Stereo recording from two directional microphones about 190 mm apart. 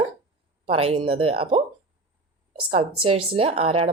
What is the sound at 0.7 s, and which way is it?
Speech, 30° right (ahead or behind).